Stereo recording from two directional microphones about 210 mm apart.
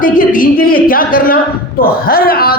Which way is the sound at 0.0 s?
40° left (ahead or behind).